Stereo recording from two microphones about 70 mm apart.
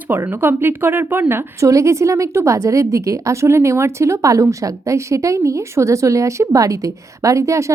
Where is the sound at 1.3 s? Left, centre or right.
Right.